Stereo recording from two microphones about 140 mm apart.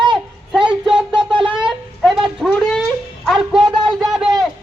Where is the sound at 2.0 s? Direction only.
Centre (ahead or behind).